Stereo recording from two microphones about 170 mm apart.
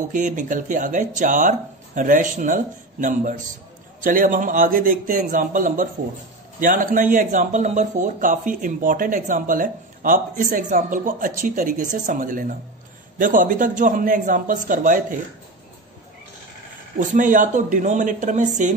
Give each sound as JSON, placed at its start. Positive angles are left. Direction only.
{"t": 0.1, "sound": "speech", "side_deg": -50}
{"t": 17.0, "sound": "speech", "side_deg": -50}